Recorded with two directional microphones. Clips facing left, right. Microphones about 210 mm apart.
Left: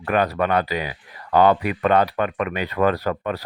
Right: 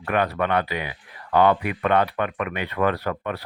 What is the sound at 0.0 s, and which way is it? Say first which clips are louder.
Speech: left 2 dB; 35° left (ahead or behind).